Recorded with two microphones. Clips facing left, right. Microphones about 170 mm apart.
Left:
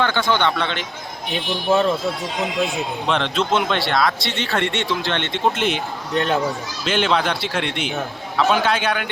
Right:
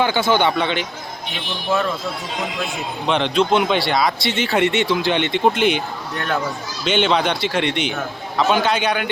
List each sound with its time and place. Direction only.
0.0 s speech: 10° right (ahead or behind)
3.1 s speech: centre (ahead or behind)
6.1 s a child's voice: 20° left (ahead or behind)
6.8 s speech: centre (ahead or behind)